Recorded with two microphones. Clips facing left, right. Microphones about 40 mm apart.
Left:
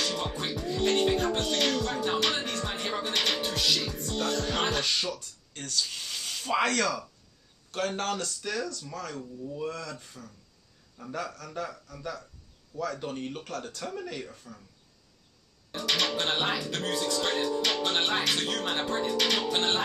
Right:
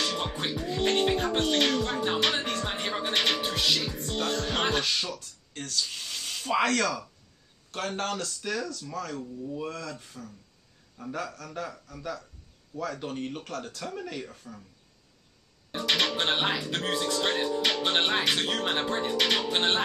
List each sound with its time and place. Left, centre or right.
0.0 s speech: right
4.5 s music: centre
4.8 s speech: centre
15.9 s speech: right